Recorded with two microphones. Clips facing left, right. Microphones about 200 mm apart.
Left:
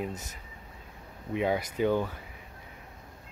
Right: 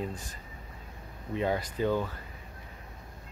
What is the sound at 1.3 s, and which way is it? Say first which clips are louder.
Speech: left 2 dB; 10° left (ahead or behind).